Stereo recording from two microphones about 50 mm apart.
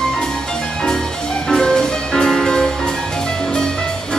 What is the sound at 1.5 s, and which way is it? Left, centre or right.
Music, centre.